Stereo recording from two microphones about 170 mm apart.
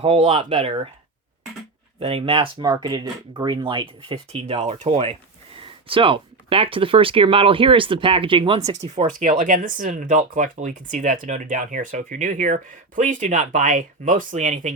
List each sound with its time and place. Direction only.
0.0 s speech: 35° right (ahead or behind)
2.0 s speech: 35° right (ahead or behind)
9.4 s speech: 50° right (ahead or behind)